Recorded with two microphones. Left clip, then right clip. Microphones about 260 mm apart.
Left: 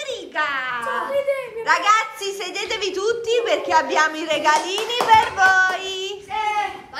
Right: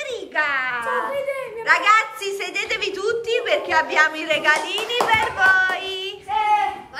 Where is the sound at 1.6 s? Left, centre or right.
Centre.